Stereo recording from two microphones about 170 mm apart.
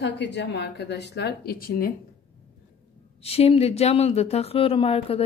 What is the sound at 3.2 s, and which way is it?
Speech, 35° left (ahead or behind).